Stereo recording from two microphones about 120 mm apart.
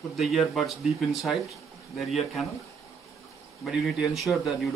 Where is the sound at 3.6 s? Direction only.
Centre (ahead or behind).